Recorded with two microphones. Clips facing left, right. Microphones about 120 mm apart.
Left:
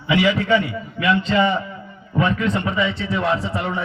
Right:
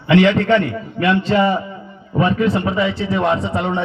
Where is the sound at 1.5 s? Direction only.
20° right (ahead or behind).